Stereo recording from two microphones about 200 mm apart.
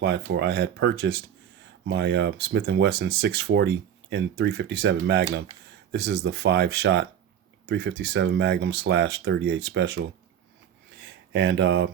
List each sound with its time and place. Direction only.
0.0 s speech: 60° right (ahead or behind)
11.3 s speech: 60° right (ahead or behind)